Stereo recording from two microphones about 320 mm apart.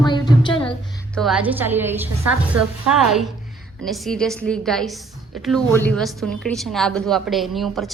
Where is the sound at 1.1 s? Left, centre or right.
Centre.